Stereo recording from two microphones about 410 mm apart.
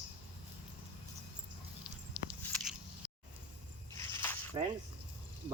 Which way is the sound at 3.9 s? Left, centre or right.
Centre.